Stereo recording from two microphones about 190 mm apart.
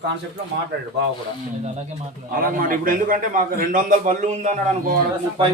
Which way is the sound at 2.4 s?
45° right (ahead or behind).